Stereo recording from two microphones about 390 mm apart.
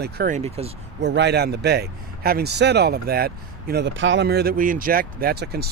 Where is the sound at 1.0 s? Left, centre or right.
Right.